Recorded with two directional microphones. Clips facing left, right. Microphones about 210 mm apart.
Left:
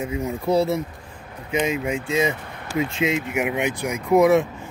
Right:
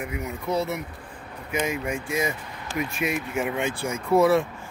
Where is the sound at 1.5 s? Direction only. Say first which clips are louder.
Left 4 dB; 20° left (ahead or behind).